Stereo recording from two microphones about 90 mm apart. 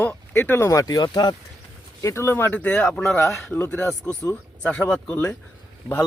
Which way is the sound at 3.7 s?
10° left (ahead or behind).